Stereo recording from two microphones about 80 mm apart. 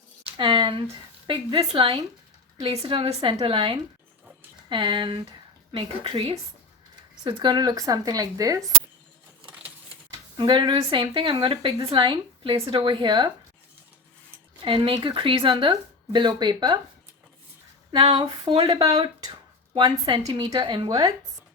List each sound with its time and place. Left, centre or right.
0.3 s speech: right
7.3 s speech: right
10.3 s speech: right
14.6 s speech: right
18.2 s speech: right
19.3 s speech: right
20.5 s speech: right
20.8 s speech: right